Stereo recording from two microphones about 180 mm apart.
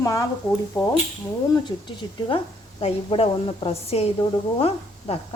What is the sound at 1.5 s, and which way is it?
A woman's voice, 25° left (ahead or behind).